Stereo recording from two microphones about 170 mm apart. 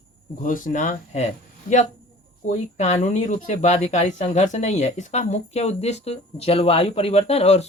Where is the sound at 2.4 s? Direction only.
40° left (ahead or behind).